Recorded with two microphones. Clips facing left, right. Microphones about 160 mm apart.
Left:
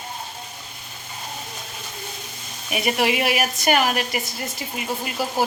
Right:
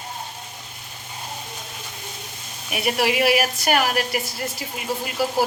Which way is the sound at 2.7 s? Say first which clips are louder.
Even; 5° right (ahead or behind).